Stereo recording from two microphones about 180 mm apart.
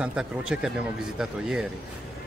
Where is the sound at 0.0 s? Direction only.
5° right (ahead or behind).